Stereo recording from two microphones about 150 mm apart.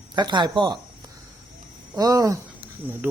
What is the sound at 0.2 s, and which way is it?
Speech, 30° right (ahead or behind).